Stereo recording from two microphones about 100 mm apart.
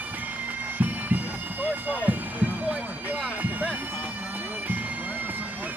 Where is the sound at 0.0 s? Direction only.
15° right (ahead or behind).